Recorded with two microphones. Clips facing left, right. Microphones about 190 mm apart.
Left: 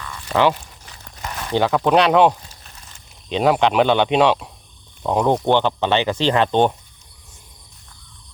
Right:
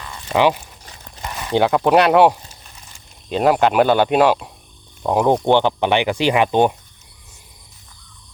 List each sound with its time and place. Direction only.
0.0 s a sound: 25° right (ahead or behind)
0.3 s speech: 15° right (ahead or behind)
1.2 s speech: 5° right (ahead or behind)